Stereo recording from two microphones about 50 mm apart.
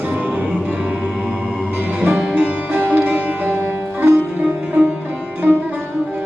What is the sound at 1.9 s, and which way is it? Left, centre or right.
Music, right.